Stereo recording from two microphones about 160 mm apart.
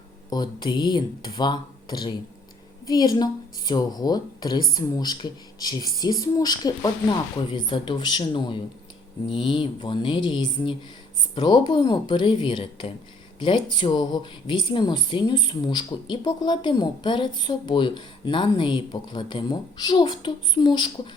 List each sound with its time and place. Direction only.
0.3 s speech: 25° left (ahead or behind)
9.2 s a sound: 30° left (ahead or behind)
11.3 s speech: 30° left (ahead or behind)